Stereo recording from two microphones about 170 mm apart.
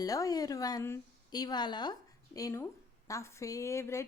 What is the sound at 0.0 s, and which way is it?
Speech, 20° left (ahead or behind).